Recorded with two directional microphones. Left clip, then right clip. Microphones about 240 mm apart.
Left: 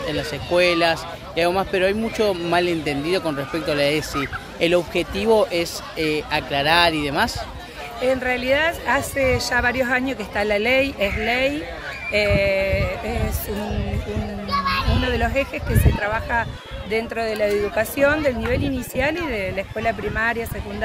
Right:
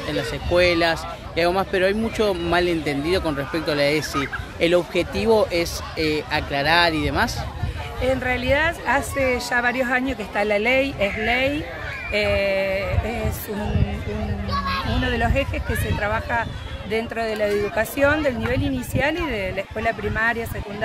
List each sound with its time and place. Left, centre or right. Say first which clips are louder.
0.1 s a man's voice: right 1 dB; centre
14.5 s a child's voice: left 3 dB; centre